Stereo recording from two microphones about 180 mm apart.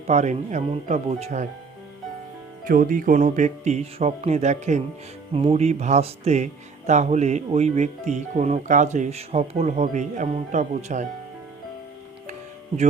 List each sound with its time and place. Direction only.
0.1 s speech: 40° right (ahead or behind)
2.6 s speech: 50° right (ahead or behind)
12.3 s music: 40° right (ahead or behind)